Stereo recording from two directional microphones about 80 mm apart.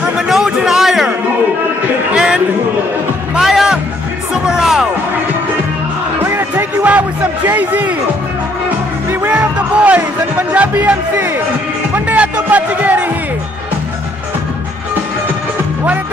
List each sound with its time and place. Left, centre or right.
0.3 s music: centre
2.1 s a sound: centre
3.3 s music: centre
6.2 s music: right
9.3 s music: centre
10.5 s speech: centre
11.9 s music: centre